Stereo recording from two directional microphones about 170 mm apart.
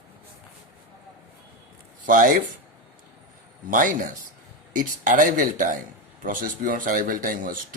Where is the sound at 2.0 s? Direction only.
50° right (ahead or behind).